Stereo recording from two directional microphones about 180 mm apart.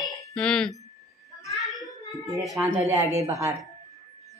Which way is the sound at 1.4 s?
15° left (ahead or behind).